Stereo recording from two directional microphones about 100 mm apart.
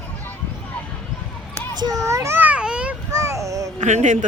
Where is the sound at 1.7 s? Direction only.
40° right (ahead or behind).